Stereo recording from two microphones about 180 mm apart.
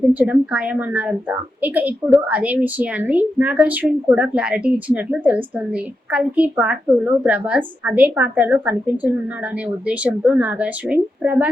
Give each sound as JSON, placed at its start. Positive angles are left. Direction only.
{"t": 0.0, "sound": "a woman's voice", "side_deg": -10}